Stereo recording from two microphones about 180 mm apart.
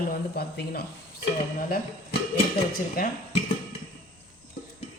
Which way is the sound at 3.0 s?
50° left (ahead or behind).